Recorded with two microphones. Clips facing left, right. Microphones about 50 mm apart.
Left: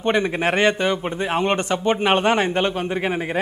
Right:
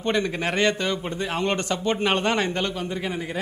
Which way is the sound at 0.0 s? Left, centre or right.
Left.